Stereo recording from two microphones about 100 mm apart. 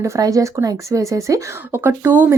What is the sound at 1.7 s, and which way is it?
Speech, 20° right (ahead or behind).